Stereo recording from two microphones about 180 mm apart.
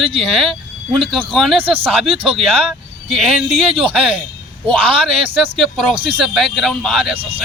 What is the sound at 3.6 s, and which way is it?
A man's voice, 30° right (ahead or behind).